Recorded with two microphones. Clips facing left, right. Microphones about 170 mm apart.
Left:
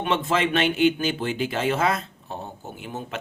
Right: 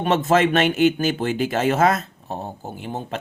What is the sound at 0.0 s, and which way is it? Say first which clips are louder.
Speech: right 5 dB; 45° right (ahead or behind).